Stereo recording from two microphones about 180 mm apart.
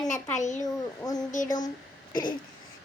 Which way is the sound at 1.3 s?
45° left (ahead or behind).